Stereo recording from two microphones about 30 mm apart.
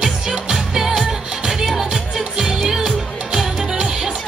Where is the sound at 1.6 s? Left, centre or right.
Centre.